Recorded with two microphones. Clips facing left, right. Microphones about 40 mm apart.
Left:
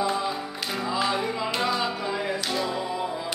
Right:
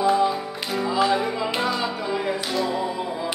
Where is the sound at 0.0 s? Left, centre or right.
Centre.